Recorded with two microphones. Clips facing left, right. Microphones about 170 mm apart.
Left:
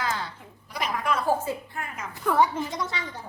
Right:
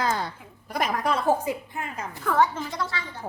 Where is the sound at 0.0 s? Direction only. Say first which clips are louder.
Right 4 dB; 40° right (ahead or behind).